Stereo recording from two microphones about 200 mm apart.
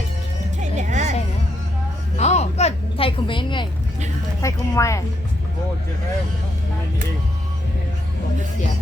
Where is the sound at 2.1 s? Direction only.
35° left (ahead or behind).